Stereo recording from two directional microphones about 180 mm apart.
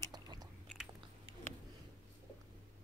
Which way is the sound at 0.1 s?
20° right (ahead or behind).